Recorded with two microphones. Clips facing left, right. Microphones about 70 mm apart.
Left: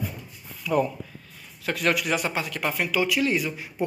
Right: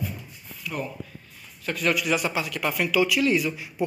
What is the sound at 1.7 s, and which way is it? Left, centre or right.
Speech, left.